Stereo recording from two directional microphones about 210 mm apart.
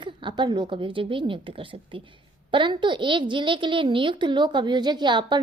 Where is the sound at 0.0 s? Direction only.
20° right (ahead or behind).